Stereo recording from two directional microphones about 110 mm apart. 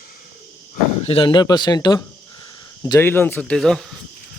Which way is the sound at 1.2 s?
40° left (ahead or behind).